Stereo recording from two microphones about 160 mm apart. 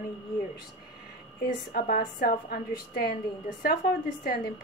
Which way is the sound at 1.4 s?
70° left (ahead or behind).